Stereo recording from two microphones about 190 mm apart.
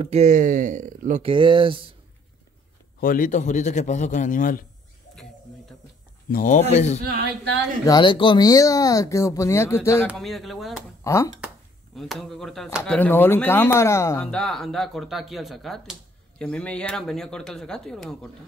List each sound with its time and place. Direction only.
0.0 s speech: 35° right (ahead or behind)
1.2 s speech: 25° right (ahead or behind)
3.0 s a man's voice: 45° left (ahead or behind)
6.3 s a man's voice: 45° left (ahead or behind)
7.8 s speech: 25° left (ahead or behind)
10.1 s speech: centre (ahead or behind)
11.1 s speech: 15° left (ahead or behind)
11.4 s speech: centre (ahead or behind)